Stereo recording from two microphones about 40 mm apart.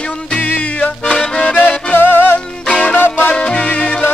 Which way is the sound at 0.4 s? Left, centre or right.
Left.